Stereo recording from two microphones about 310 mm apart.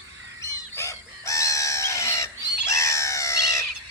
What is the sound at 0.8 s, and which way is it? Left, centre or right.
Chicken, centre.